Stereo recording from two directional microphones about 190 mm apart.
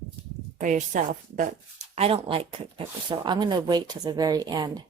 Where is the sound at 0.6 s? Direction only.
40° right (ahead or behind).